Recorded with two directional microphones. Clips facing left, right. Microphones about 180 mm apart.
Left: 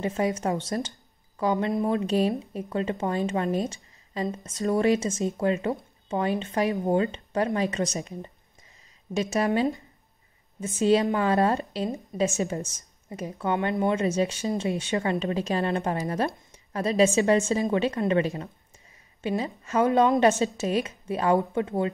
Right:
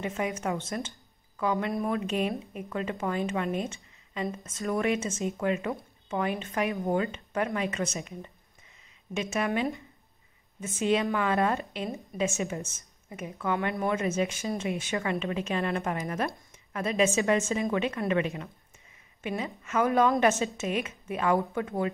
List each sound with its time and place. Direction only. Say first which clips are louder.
0.0 s a woman's voice: left 5 dB; 35° left (ahead or behind)